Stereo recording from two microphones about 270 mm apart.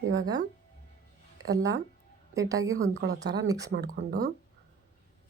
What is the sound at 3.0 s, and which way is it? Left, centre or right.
Speech, right.